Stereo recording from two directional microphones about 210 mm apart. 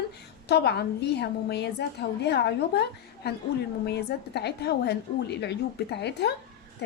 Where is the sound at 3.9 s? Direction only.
50° left (ahead or behind).